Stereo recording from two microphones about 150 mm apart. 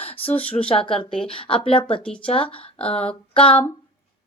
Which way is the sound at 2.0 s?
5° left (ahead or behind).